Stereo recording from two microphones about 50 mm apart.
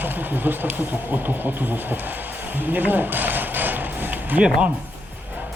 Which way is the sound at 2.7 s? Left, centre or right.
Right.